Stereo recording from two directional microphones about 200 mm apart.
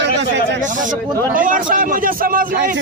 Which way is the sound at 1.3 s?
40° right (ahead or behind).